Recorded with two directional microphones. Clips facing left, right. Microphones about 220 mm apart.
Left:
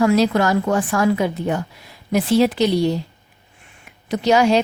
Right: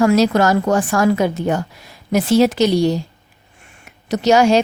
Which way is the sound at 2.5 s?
85° right.